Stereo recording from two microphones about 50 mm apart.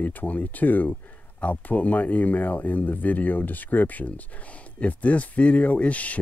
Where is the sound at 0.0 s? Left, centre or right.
Left.